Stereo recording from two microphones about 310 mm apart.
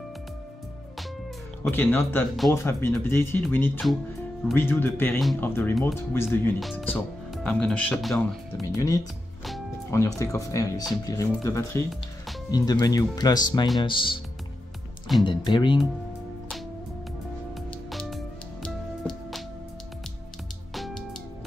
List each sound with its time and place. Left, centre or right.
1.6 s speech: centre
8.7 s speech: centre
15.2 s speech: centre
17.6 s music: centre
20.7 s music: centre